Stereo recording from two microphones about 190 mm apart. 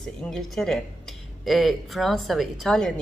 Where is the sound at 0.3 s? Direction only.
Centre (ahead or behind).